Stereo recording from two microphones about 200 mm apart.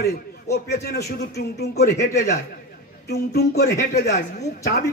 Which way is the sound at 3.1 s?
55° left (ahead or behind).